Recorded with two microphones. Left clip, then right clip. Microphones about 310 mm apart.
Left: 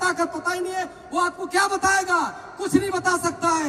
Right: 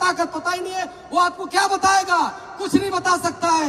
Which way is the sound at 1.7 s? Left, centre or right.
Right.